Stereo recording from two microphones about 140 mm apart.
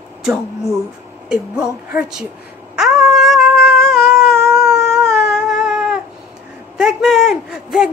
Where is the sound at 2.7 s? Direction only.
5° right (ahead or behind).